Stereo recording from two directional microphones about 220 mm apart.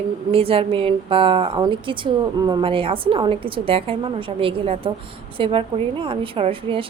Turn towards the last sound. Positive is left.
turn(degrees=-25)  # may be behind; listen again after turning